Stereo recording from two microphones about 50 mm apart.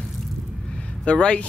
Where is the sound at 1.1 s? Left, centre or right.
Left.